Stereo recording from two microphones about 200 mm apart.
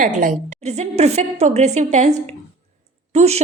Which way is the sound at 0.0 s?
40° right (ahead or behind).